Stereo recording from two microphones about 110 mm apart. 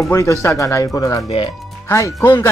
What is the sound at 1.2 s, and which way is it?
Speech, 55° left (ahead or behind).